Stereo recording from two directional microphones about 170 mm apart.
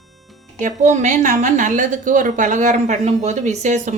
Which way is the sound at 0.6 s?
45° right (ahead or behind).